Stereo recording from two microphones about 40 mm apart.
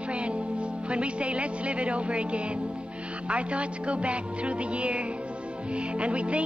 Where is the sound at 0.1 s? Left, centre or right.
Right.